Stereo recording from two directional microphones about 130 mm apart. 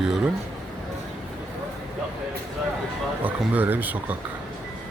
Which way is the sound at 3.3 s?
15° right (ahead or behind).